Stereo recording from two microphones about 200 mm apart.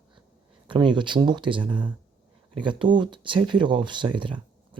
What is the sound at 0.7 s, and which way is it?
Speech, 25° right (ahead or behind).